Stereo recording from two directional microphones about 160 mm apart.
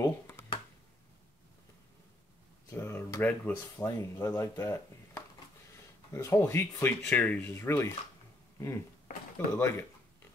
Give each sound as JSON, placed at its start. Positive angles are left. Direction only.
{"t": 0.0, "sound": "computer keyboard", "side_deg": 20}
{"t": 2.7, "sound": "speech", "side_deg": 20}
{"t": 9.5, "sound": "speech", "side_deg": 15}